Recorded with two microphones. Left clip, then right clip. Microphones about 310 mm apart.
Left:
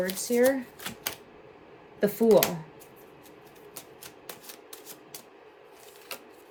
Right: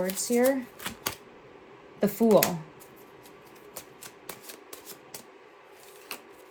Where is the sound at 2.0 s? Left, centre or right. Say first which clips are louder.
Left 1 dB; centre.